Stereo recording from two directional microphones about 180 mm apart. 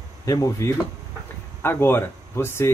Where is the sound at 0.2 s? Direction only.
20° left (ahead or behind).